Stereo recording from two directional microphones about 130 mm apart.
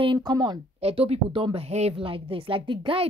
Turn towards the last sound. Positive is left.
turn(degrees=-40)  # may be behind; listen again after turning